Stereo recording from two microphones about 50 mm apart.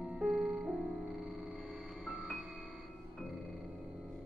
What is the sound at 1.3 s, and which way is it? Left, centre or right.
Music, centre.